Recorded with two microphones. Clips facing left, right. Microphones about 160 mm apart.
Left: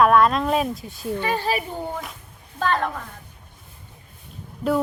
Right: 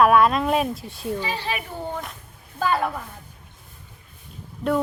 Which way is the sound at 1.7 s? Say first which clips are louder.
Left 2 dB; 15° left (ahead or behind).